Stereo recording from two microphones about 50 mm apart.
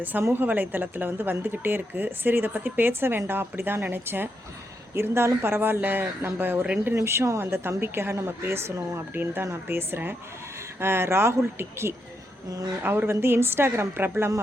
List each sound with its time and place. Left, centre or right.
0.2 s speech: right
0.4 s speech: right
4.9 s speech: right
6.9 s speech: right
9.1 s speech: right
12.8 s speech: right
14.0 s speech: right